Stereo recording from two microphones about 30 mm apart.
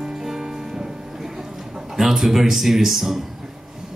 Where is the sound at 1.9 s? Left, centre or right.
Centre.